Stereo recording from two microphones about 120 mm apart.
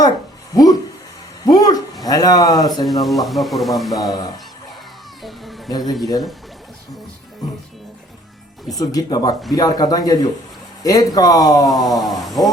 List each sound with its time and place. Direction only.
0.5 s speech: 30° left (ahead or behind)
1.5 s a sound: 30° left (ahead or behind)
2.0 s speech: 30° left (ahead or behind)
2.8 s speech: centre (ahead or behind)
5.2 s a sound: centre (ahead or behind)
5.8 s speech: centre (ahead or behind)
8.7 s speech: 30° left (ahead or behind)
11.9 s speech: centre (ahead or behind)